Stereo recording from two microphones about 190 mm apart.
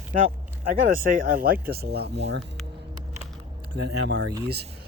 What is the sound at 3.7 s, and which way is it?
Speech, 65° right (ahead or behind).